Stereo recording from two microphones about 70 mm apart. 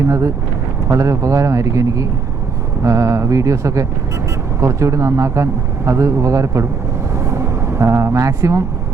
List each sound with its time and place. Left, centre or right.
0.9 s a man's voice: right
7.3 s vehicle: right